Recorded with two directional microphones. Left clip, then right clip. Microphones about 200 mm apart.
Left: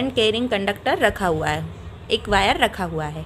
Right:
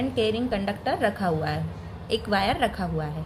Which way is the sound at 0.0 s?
30° left (ahead or behind).